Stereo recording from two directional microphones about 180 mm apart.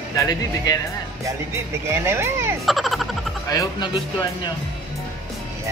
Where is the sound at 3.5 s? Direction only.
25° left (ahead or behind).